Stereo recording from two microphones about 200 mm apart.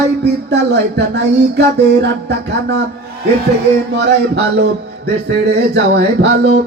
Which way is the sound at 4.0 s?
60° right (ahead or behind).